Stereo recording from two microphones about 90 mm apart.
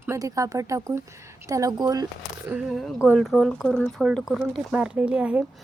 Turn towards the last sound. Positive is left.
turn(degrees=-15)  # may be behind; listen again after turning